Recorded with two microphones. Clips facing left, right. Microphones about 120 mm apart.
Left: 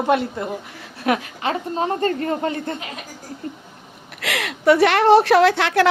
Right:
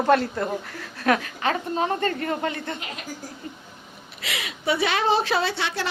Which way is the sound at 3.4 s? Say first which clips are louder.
Left 10 dB; 45° left (ahead or behind).